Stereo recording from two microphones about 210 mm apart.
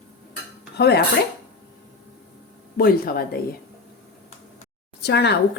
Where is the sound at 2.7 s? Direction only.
45° left (ahead or behind).